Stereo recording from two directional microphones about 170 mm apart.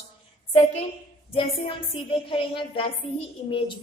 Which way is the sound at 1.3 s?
35° left (ahead or behind).